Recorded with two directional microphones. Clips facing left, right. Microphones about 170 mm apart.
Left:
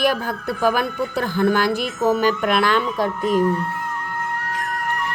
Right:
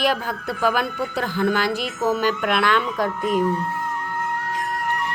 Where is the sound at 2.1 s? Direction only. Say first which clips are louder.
Left 3 dB; 40° left (ahead or behind).